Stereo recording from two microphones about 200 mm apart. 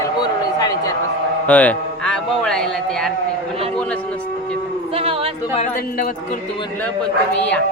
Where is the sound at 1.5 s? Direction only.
5° left (ahead or behind).